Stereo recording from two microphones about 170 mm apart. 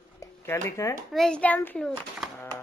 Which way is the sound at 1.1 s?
5° left (ahead or behind).